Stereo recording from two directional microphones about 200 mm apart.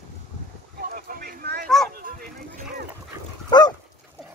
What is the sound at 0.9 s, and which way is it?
Boat, 50° right (ahead or behind).